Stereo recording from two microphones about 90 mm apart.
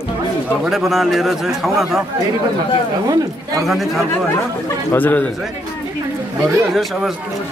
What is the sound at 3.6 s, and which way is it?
Speech, centre (ahead or behind).